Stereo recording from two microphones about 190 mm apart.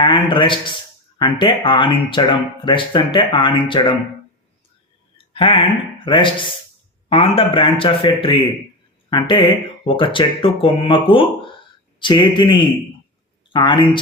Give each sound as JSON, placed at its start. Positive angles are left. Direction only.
{"t": 0.0, "sound": "speech", "side_deg": 25}
{"t": 5.1, "sound": "a sound", "side_deg": 25}
{"t": 6.1, "sound": "speech", "side_deg": 25}